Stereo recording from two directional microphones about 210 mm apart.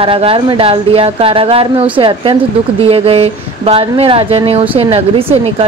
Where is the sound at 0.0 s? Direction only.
25° right (ahead or behind).